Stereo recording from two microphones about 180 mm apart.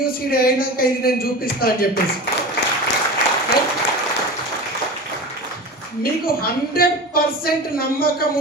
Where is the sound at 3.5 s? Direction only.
65° left (ahead or behind).